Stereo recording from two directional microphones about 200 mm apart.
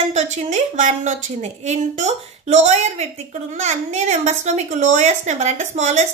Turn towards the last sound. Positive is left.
turn(degrees=-35)  # may be behind; listen again after turning